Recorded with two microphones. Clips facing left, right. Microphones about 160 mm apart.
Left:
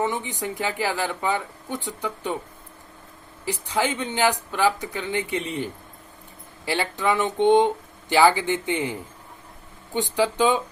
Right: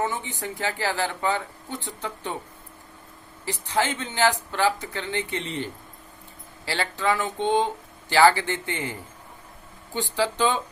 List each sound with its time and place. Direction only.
0.0 s speech: 15° left (ahead or behind)
3.4 s speech: 15° left (ahead or behind)
6.7 s speech: 15° left (ahead or behind)